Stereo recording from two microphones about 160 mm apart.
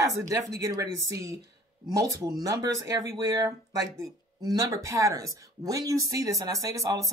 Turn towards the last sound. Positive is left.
turn(degrees=-20)  # may be behind; listen again after turning